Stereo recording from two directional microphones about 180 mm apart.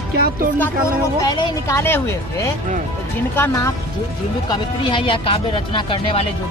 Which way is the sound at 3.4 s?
15° left (ahead or behind).